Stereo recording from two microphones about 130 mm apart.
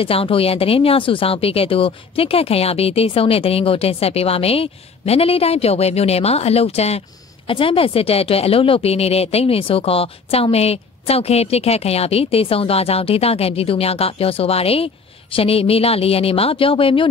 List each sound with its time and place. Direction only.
0.0 s speech: 45° left (ahead or behind)